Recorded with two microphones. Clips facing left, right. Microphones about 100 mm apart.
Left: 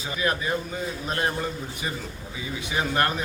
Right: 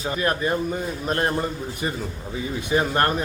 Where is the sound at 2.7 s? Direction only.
40° right (ahead or behind).